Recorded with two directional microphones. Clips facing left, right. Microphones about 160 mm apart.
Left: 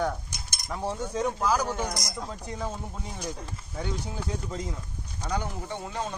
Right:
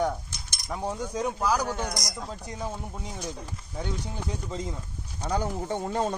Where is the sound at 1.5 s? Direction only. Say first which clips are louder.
Even; 10° left (ahead or behind).